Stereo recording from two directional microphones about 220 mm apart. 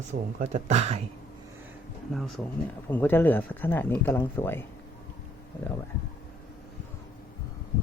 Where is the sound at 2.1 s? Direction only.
Centre (ahead or behind).